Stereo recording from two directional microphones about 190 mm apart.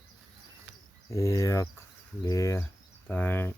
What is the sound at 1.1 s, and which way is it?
Speech, 15° left (ahead or behind).